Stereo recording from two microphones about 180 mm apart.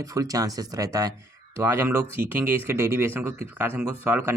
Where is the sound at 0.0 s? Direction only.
20° right (ahead or behind).